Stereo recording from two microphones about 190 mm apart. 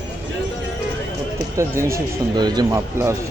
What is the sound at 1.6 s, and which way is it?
Speech, 15° right (ahead or behind).